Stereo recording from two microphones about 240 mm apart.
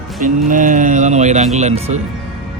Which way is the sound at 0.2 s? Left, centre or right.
Right.